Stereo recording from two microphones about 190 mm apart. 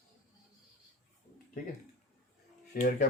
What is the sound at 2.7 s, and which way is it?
Speech, 55° left (ahead or behind).